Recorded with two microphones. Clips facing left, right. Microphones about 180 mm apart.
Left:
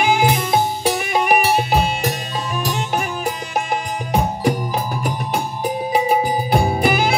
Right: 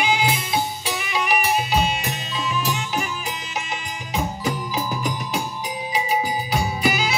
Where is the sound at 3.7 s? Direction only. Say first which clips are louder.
Left 8 dB; 55° left (ahead or behind).